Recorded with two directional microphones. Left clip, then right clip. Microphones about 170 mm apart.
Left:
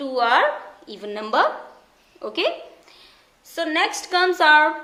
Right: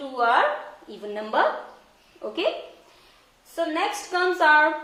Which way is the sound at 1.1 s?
30° left (ahead or behind).